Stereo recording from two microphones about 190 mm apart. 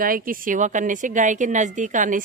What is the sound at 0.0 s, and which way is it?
Speech, 50° right (ahead or behind).